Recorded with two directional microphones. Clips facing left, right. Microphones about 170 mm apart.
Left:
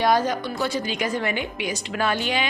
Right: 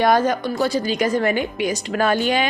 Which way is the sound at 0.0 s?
50° right (ahead or behind).